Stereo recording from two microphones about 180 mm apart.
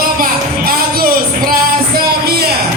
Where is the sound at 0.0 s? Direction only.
55° right (ahead or behind).